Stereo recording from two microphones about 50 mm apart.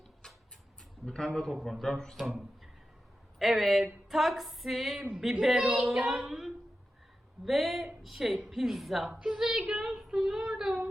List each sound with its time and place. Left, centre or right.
1.0 s a man's voice: centre
1.5 s a woman's voice: centre
10.2 s a woman's voice: centre